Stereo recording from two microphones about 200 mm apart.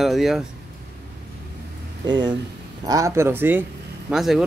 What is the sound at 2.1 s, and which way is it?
Speech, 20° right (ahead or behind).